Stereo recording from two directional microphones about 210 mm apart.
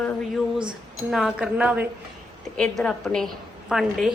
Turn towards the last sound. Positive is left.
turn(degrees=0)  # may be behind; listen again after turning